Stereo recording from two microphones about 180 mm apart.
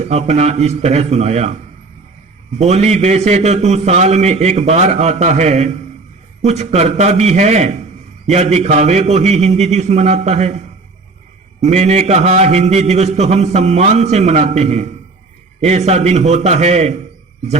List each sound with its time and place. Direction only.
0.0 s a man's voice: 40° right (ahead or behind)
2.6 s a man's voice: 35° right (ahead or behind)
11.6 s a man's voice: 35° right (ahead or behind)